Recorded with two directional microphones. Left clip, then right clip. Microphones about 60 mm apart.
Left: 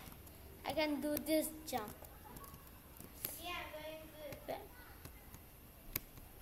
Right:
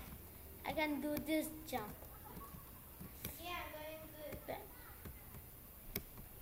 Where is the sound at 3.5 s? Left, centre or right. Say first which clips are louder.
Left 1 dB; left.